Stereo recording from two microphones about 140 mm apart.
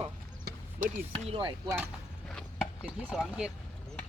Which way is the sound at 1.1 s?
40° right (ahead or behind).